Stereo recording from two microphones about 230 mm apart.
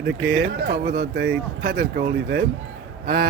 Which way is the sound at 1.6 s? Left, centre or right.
Right.